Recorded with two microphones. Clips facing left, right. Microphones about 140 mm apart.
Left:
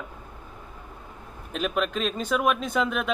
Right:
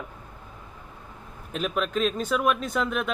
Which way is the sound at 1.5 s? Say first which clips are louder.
Even; centre (ahead or behind).